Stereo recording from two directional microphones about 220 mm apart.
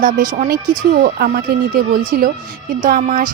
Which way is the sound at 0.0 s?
35° right (ahead or behind).